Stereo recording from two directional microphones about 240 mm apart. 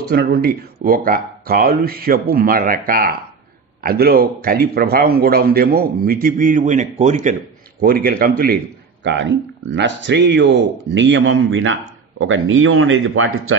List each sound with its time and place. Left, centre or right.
0.1 s a man's voice: right
7.8 s a man's voice: right